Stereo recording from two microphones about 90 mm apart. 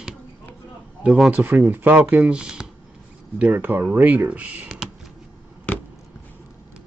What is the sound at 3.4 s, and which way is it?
Speech, 20° right (ahead or behind).